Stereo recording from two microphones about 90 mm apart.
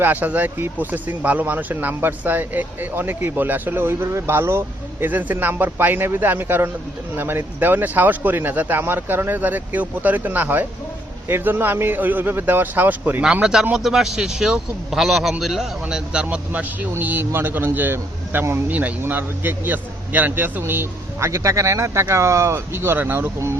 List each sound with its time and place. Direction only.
0.0 s speech: 20° right (ahead or behind)
13.2 s a man's voice: 10° right (ahead or behind); by 23.6 s 30° right (ahead or behind)